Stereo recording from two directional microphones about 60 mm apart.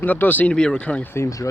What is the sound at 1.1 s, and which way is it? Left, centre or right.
Speech, left.